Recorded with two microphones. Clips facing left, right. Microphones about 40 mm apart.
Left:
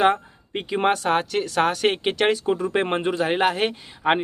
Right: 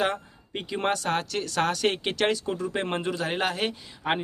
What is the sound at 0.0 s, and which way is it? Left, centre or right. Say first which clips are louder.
Speech: left 8 dB; left.